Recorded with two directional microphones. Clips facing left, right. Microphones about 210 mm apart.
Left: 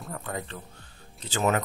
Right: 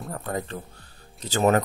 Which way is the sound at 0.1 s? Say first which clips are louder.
Right 4 dB; 40° right (ahead or behind).